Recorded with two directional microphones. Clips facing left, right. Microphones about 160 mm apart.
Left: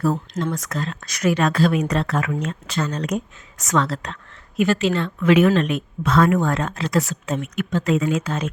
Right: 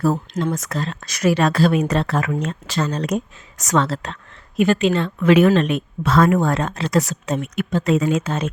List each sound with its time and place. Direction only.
0.3 s speech: 25° right (ahead or behind)
5.3 s speech: 35° right (ahead or behind)
6.1 s speech: 40° right (ahead or behind)
8.2 s speech: 25° right (ahead or behind)